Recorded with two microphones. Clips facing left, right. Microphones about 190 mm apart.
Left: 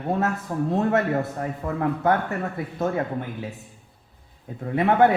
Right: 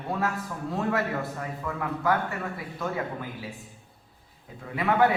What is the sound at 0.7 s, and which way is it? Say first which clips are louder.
A man's voice: left 5 dB; 25° left (ahead or behind).